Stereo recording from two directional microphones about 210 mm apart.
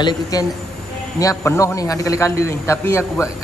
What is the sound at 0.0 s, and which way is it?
A man's voice, 15° left (ahead or behind).